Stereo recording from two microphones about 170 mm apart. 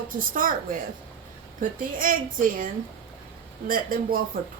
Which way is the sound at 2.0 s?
55° right (ahead or behind).